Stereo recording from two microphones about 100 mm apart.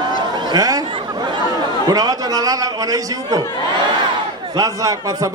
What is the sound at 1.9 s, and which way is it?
A man's voice, 40° right (ahead or behind).